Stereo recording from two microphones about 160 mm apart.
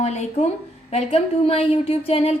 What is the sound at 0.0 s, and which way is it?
A woman's voice, 45° left (ahead or behind).